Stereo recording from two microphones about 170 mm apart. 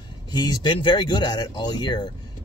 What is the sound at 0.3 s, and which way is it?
Speech, 25° left (ahead or behind).